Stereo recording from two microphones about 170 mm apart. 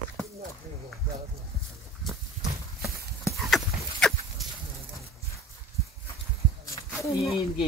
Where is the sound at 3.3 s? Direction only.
Centre (ahead or behind).